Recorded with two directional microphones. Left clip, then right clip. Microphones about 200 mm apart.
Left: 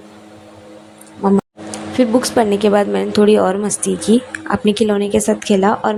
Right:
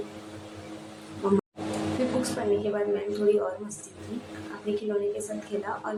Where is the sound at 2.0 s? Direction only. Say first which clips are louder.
Left 16 dB; 40° left (ahead or behind).